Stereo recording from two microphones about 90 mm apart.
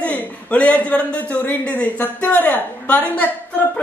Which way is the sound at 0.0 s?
15° left (ahead or behind).